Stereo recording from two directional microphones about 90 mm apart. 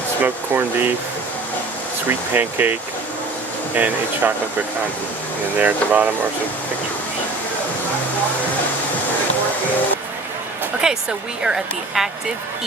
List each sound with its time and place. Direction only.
0.2 s speech: 20° right (ahead or behind)
2.0 s speech: 20° right (ahead or behind)
3.8 s speech: 20° right (ahead or behind)
5.5 s speech: 15° right (ahead or behind)
10.8 s a woman's voice: 10° right (ahead or behind)